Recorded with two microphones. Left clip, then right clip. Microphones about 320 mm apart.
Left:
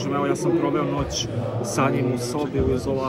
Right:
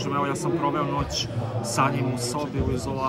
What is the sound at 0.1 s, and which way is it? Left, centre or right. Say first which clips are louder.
A man's voice: left 4 dB; centre.